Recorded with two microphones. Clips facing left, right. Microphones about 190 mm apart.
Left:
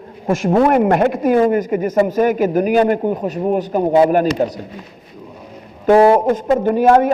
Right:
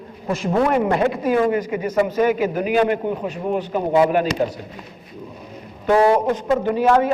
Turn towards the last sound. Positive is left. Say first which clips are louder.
# left 4 dB
turn(degrees=50)  # may be behind; listen again after turning